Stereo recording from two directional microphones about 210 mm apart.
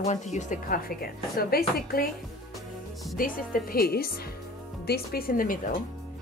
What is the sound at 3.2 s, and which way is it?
A woman's voice, 45° left (ahead or behind).